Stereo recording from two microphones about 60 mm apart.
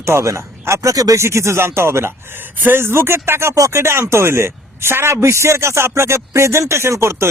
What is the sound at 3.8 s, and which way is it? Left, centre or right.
A man's voice, right.